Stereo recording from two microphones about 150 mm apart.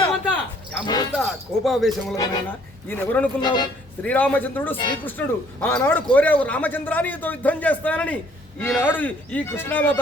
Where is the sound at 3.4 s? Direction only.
30° left (ahead or behind).